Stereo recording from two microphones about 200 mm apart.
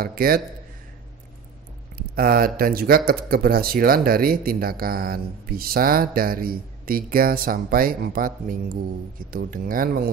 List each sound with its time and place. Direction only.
0.0 s speech: 45° right (ahead or behind)
2.0 s speech: 45° right (ahead or behind)